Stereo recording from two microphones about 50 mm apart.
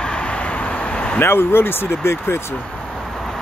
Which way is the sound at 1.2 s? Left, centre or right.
Left.